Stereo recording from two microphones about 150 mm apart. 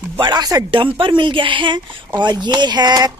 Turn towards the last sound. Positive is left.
turn(degrees=-30)  # may be behind; listen again after turning